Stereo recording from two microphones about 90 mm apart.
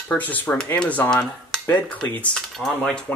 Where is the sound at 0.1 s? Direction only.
15° left (ahead or behind).